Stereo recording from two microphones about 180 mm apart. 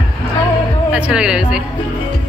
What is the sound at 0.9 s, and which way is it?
Speech, 5° right (ahead or behind).